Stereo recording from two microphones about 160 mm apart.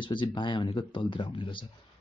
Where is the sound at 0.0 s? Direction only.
30° left (ahead or behind).